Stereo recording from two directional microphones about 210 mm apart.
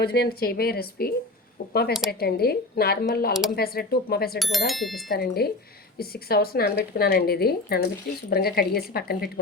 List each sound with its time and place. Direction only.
0.0 s a woman's voice: 50° left (ahead or behind)
4.4 s speech: centre (ahead or behind)
5.0 s a woman's voice: 45° left (ahead or behind)